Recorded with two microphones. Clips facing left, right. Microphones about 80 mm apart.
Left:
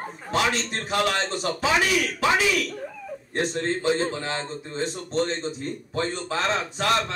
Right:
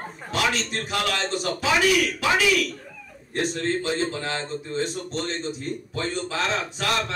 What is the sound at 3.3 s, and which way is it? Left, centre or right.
Speech, left.